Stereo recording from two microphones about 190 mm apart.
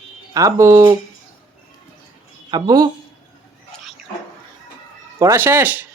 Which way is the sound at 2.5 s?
20° right (ahead or behind).